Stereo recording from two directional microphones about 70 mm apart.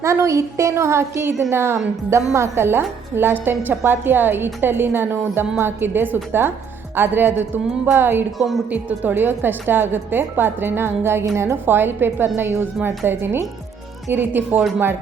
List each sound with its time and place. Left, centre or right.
0.0 s a woman's voice: right
8.4 s speech: centre
8.7 s a woman's voice: right